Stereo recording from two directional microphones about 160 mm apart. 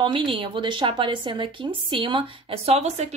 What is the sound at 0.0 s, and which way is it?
A woman's voice, 35° right (ahead or behind).